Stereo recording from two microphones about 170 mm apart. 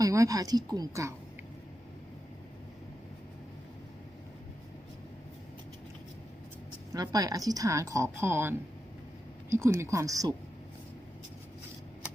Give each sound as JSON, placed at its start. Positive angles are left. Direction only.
{"t": 0.0, "sound": "a woman's voice", "side_deg": -20}
{"t": 6.9, "sound": "a woman's voice", "side_deg": -20}
{"t": 9.6, "sound": "speech", "side_deg": -15}